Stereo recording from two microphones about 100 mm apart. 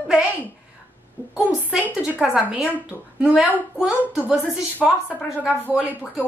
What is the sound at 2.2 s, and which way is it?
Speech, 10° right (ahead or behind).